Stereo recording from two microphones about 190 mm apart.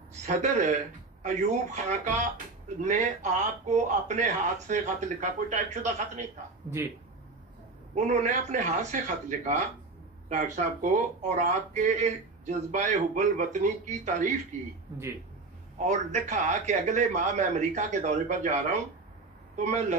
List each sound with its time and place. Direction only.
0.3 s speech: 40° right (ahead or behind)
7.9 s speech: 40° right (ahead or behind)
10.3 s speech: 40° right (ahead or behind)
15.8 s speech: 40° right (ahead or behind)